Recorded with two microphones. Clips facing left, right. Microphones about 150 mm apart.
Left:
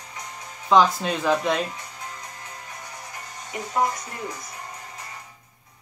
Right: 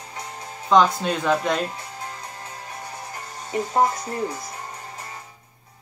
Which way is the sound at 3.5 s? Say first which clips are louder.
Right 4 dB; 30° right (ahead or behind).